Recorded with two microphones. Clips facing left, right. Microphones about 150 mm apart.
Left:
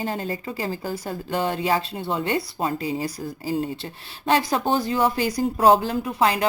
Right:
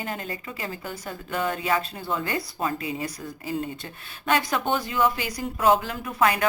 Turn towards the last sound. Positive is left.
turn(degrees=30)  # may be behind; listen again after turning